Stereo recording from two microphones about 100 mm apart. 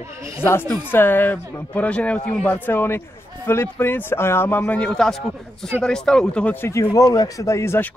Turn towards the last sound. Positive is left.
turn(degrees=25)  # may be behind; listen again after turning